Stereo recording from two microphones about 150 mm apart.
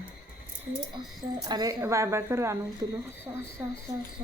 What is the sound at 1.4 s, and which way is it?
A woman's voice, 25° right (ahead or behind).